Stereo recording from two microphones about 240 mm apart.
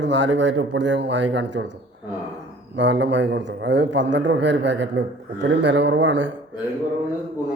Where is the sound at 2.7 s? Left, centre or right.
Right.